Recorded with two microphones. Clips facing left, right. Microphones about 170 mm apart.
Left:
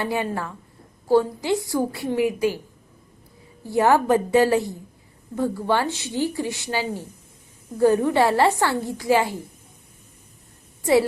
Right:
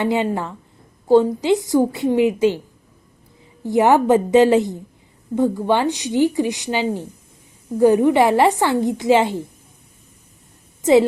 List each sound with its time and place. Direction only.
0.0 s a woman's voice: 20° right (ahead or behind)
3.6 s a woman's voice: 20° right (ahead or behind)